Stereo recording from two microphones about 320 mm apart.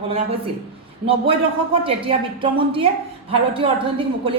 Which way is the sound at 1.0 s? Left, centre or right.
Centre.